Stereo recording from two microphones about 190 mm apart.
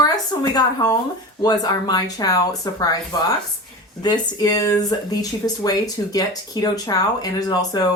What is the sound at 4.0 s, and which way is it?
Speech, 20° left (ahead or behind).